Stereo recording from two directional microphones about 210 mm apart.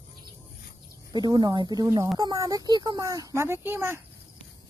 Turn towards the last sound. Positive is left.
turn(degrees=-10)  # may be behind; listen again after turning